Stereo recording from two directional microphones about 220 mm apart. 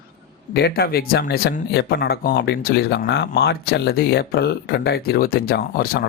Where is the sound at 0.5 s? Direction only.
45° left (ahead or behind).